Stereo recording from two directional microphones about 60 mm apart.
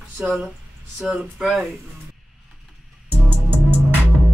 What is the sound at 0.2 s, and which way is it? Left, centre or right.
Speech, right.